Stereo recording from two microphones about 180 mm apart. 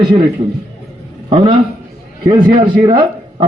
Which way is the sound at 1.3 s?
30° right (ahead or behind).